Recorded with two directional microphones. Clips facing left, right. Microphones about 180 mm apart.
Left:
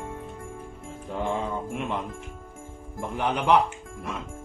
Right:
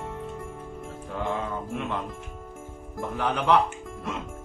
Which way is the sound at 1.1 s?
15° left (ahead or behind).